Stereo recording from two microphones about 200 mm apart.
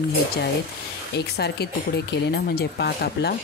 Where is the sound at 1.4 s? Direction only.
55° left (ahead or behind).